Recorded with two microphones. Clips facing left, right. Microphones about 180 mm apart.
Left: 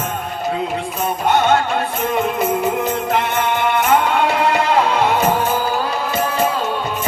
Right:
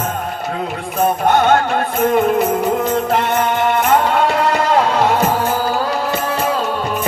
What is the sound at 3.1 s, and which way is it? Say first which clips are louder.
Music: right 2 dB; 40° right (ahead or behind).